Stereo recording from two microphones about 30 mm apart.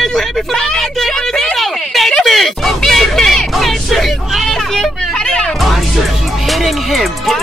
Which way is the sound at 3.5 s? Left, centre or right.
Centre.